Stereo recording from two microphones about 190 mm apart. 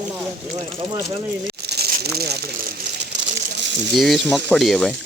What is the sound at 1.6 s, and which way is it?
Crumpling, 55° right (ahead or behind).